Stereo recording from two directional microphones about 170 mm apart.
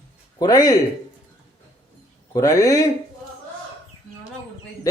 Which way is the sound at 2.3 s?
20° left (ahead or behind).